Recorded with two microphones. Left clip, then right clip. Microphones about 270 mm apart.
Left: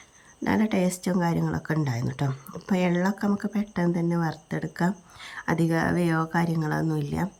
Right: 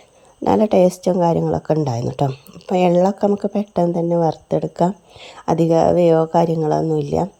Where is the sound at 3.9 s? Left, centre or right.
Right.